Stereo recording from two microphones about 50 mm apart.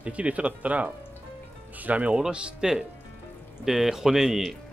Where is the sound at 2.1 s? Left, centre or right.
Centre.